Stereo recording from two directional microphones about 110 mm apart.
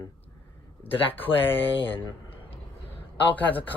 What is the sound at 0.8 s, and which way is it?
Speech, 55° left (ahead or behind).